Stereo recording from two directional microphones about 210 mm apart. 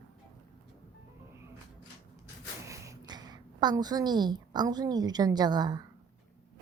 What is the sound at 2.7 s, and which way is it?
A woman's voice, 15° right (ahead or behind).